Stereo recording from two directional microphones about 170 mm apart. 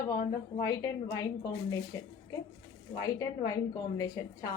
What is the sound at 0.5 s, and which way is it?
A woman's voice, 20° left (ahead or behind).